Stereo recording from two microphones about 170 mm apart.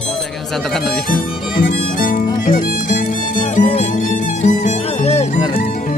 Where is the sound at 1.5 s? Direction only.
55° left (ahead or behind); by 5.3 s 40° left (ahead or behind).